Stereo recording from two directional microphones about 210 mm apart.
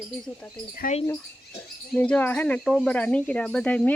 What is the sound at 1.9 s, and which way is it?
Speech, 5° left (ahead or behind).